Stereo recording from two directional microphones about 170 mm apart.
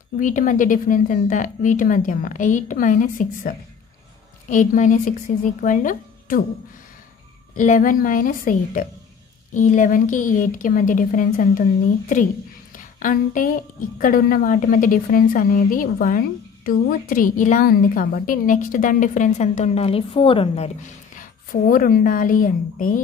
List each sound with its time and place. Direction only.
0.2 s a woman's voice: 50° left (ahead or behind)
7.5 s a woman's voice: 50° left (ahead or behind)
12.7 s a woman's voice: 50° left (ahead or behind); by 20.7 s 35° left (ahead or behind)
21.2 s a woman's voice: 55° left (ahead or behind)